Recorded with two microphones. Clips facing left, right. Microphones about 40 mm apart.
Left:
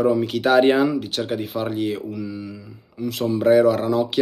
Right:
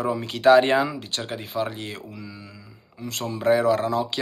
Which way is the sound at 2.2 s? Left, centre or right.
Left.